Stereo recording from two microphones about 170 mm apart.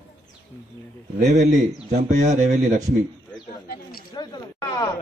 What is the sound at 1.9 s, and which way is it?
Speech, 45° right (ahead or behind).